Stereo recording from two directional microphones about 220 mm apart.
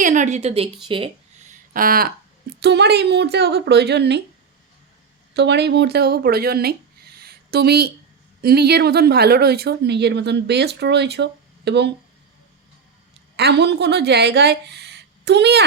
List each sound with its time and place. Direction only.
0.0 s a woman's voice: 35° right (ahead or behind)
5.3 s speech: 50° right (ahead or behind)
13.3 s speech: 50° right (ahead or behind)